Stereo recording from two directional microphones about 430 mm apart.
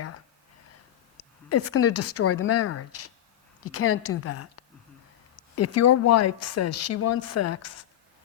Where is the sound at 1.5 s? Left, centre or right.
Left.